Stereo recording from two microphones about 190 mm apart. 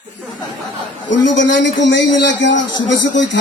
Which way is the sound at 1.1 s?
70° left (ahead or behind).